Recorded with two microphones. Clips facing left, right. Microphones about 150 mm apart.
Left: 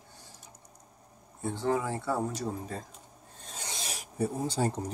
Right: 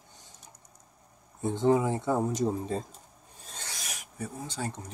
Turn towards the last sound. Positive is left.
turn(degrees=35)  # may be behind; listen again after turning